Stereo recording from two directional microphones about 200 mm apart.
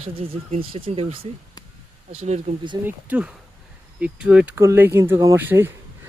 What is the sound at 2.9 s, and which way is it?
Speech, 5° right (ahead or behind).